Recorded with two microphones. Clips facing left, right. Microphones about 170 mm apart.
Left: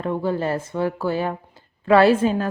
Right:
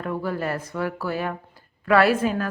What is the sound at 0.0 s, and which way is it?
Speech, 25° left (ahead or behind).